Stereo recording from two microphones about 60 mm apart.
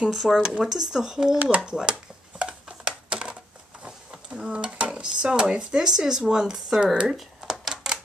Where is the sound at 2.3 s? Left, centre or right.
Centre.